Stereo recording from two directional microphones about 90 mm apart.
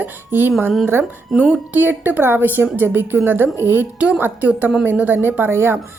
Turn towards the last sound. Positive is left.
turn(degrees=-25)  # may be behind; listen again after turning